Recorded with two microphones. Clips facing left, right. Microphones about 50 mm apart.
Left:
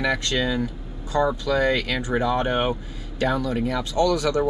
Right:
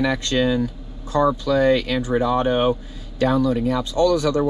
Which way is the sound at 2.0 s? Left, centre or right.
Left.